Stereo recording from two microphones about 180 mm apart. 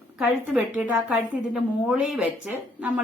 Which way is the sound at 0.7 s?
5° right (ahead or behind).